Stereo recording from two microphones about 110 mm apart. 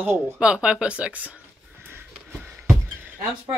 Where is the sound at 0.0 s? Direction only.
20° right (ahead or behind).